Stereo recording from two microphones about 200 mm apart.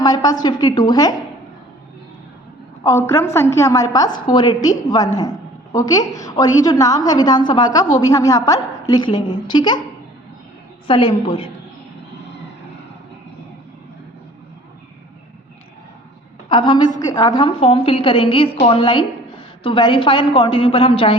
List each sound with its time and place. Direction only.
0.0 s a woman's voice: 20° left (ahead or behind)
2.8 s a woman's voice: 15° left (ahead or behind)
10.8 s a woman's voice: 25° left (ahead or behind)
16.5 s a woman's voice: 25° left (ahead or behind)